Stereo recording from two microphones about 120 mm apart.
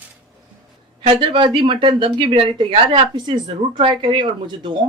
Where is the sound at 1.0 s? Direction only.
45° right (ahead or behind).